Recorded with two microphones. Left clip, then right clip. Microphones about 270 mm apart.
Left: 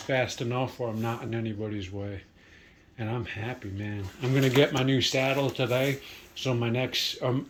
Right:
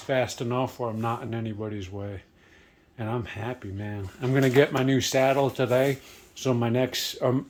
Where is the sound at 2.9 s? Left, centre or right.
Centre.